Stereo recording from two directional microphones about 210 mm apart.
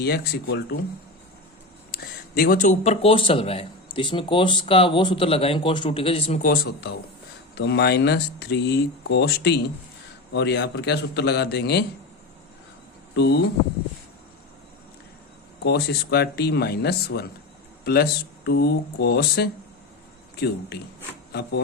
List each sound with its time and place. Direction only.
0.0 s speech: 50° left (ahead or behind)
1.9 s speech: 45° left (ahead or behind); by 6.4 s 25° left (ahead or behind)
6.4 s speech: 45° left (ahead or behind)
13.1 s speech: 50° left (ahead or behind)
15.6 s speech: 50° left (ahead or behind)